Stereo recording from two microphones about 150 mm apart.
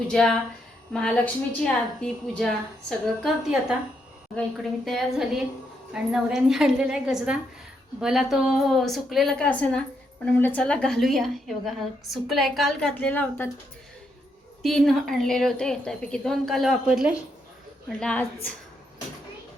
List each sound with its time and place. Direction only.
0.1 s a woman's voice: 5° left (ahead or behind)
9.5 s a woman's voice: 10° left (ahead or behind)
14.6 s a woman's voice: centre (ahead or behind)